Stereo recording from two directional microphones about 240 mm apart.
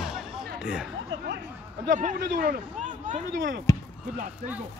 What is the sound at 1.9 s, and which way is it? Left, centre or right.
Speech, right.